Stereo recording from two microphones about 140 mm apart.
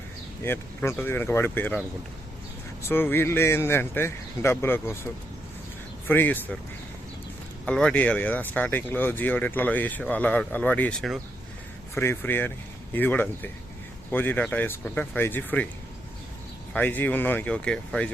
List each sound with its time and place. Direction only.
0.4 s speech: 15° left (ahead or behind)
2.8 s speech: 15° left (ahead or behind)
6.1 s speech: 15° left (ahead or behind)
7.6 s speech: 5° left (ahead or behind)
16.7 s speech: 15° left (ahead or behind)